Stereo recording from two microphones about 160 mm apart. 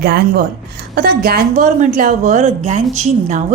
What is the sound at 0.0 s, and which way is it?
Speech, 85° right.